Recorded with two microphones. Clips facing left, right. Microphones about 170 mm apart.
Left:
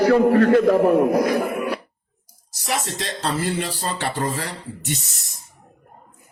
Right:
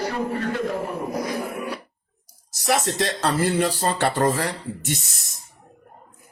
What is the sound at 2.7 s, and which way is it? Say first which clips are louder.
Speech: right 4 dB; 55° right (ahead or behind).